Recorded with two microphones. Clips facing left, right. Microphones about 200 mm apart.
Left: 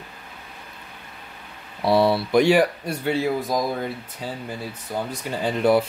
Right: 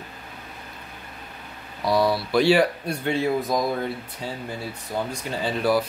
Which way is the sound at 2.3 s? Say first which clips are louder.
Left 1 dB; 15° left (ahead or behind).